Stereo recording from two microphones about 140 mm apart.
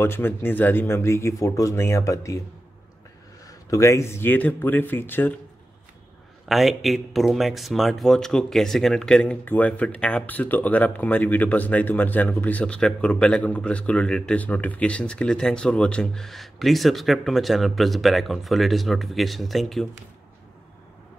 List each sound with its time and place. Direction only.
0.0 s speech: 15° left (ahead or behind)
3.4 s speech: 25° left (ahead or behind)
6.5 s speech: centre (ahead or behind)